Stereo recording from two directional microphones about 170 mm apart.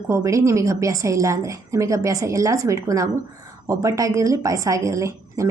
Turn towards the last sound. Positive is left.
turn(degrees=-20)  # may be behind; listen again after turning